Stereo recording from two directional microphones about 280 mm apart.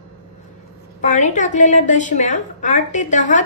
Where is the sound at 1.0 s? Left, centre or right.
Left.